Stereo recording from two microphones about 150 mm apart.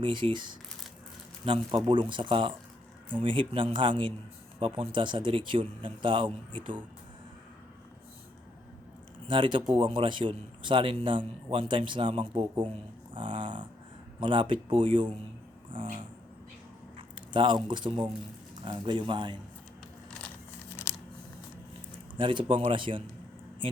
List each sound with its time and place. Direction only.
0.0 s a man's voice: 35° right (ahead or behind)
9.2 s a man's voice: 30° right (ahead or behind)
17.2 s squish: 30° right (ahead or behind)
17.7 s a man's voice: 30° right (ahead or behind)
20.1 s a sound: 10° left (ahead or behind)
22.2 s a man's voice: 35° right (ahead or behind)